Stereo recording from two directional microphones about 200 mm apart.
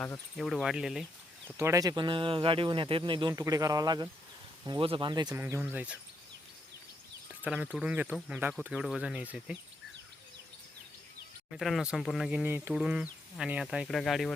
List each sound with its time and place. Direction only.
0.0 s speech: 5° left (ahead or behind)
1.5 s speech: 15° right (ahead or behind)
7.3 s speech: 5° right (ahead or behind)
11.5 s speech: centre (ahead or behind)